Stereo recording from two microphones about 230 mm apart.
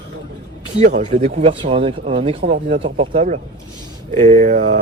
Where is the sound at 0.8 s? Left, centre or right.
Right.